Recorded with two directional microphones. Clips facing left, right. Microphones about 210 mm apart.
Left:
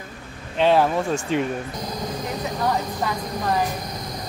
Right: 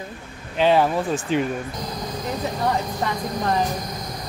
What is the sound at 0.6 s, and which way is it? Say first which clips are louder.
Speech: even; centre (ahead or behind).